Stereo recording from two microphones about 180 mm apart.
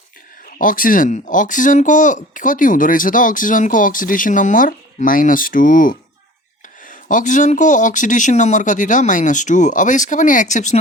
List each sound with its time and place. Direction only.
0.6 s speech: 50° left (ahead or behind)